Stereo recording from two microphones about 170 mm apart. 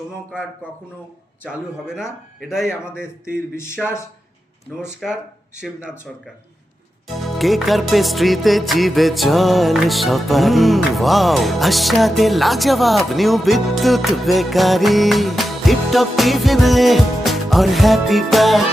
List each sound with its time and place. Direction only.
1.5 s music: 5° right (ahead or behind)
3.8 s music: centre (ahead or behind)
7.2 s music: centre (ahead or behind)